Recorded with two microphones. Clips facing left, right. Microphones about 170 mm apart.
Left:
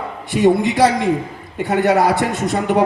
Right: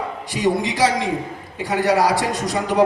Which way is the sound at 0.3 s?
55° left (ahead or behind).